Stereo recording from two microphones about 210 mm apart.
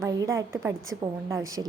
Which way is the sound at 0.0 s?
15° right (ahead or behind).